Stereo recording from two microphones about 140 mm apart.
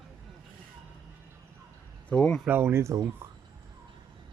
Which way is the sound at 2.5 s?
15° right (ahead or behind).